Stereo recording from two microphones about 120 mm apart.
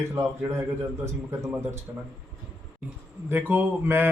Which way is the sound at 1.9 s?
25° right (ahead or behind).